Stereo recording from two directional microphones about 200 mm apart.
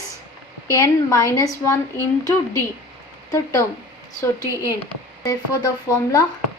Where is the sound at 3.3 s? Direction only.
15° left (ahead or behind).